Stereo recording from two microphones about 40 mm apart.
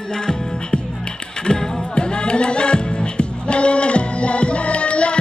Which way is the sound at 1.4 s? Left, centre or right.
Left.